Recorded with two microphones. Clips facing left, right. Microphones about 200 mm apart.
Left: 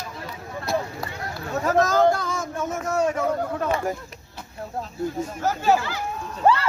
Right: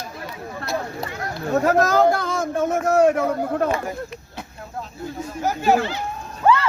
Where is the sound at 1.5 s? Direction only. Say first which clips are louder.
Right 3 dB; 60° right (ahead or behind).